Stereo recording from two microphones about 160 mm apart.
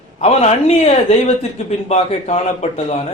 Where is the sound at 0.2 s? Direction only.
45° left (ahead or behind).